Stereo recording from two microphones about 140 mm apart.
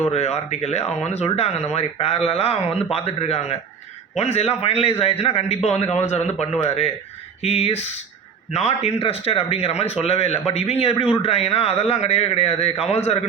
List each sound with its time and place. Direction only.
0.1 s speech: 50° left (ahead or behind)